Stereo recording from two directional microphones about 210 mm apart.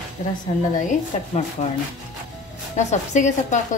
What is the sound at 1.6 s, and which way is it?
Speech, 35° left (ahead or behind).